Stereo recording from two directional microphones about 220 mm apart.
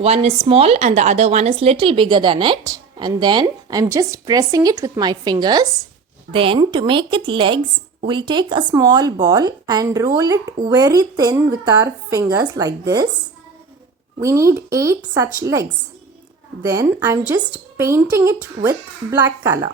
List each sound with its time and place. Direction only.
0.0 s speech: 30° right (ahead or behind)
14.2 s speech: 15° right (ahead or behind)
16.6 s speech: 15° right (ahead or behind)